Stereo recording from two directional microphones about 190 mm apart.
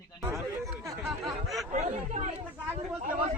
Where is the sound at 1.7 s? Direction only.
35° right (ahead or behind).